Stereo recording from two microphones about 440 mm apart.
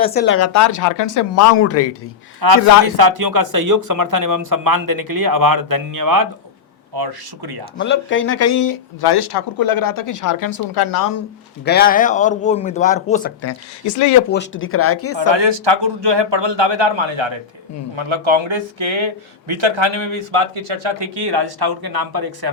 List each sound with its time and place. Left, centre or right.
0.0 s speech: left
2.4 s speech: right
7.8 s speech: left
11.6 s a man's voice: left
13.4 s speech: left
14.3 s speech: left
15.3 s a man's voice: right
20.7 s speech: right